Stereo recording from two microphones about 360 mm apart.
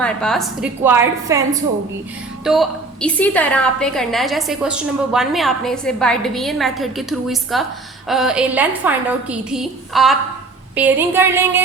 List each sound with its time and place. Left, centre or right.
0.0 s a woman's voice: centre
2.4 s a woman's voice: centre